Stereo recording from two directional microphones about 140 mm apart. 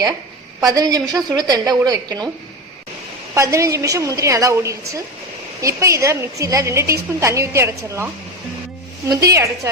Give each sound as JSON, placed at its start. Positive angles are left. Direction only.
{"t": 0.6, "sound": "a woman's voice", "side_deg": -25}
{"t": 3.3, "sound": "a woman's voice", "side_deg": -20}